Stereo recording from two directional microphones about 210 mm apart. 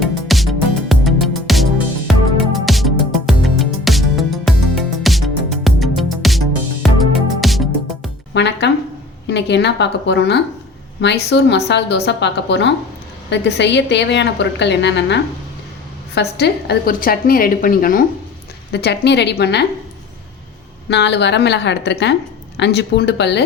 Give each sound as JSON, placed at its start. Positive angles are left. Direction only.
{"t": 0.0, "sound": "music", "side_deg": 0}
{"t": 8.3, "sound": "music", "side_deg": 55}
{"t": 9.2, "sound": "a woman's voice", "side_deg": 55}
{"t": 16.4, "sound": "speech", "side_deg": 50}
{"t": 18.7, "sound": "speech", "side_deg": 55}
{"t": 20.9, "sound": "a woman's voice", "side_deg": 55}